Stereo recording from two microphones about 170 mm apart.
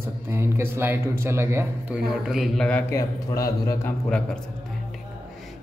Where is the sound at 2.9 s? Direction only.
20° left (ahead or behind).